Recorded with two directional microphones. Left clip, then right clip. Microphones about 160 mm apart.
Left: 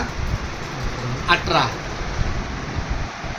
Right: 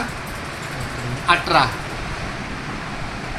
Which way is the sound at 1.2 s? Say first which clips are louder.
Right 2 dB; 25° right (ahead or behind).